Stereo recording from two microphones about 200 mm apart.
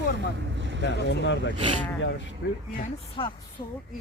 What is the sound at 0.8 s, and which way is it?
Speech, 60° left (ahead or behind).